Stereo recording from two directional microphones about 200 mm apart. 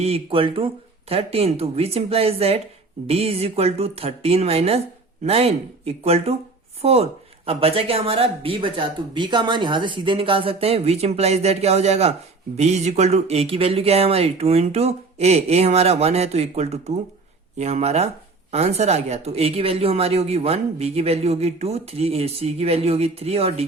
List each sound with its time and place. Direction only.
0.0 s speech: 30° right (ahead or behind)